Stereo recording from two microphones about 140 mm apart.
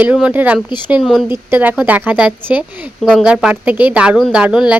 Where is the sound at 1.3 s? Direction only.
15° right (ahead or behind).